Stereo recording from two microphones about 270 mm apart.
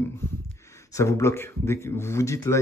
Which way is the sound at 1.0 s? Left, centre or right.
Centre.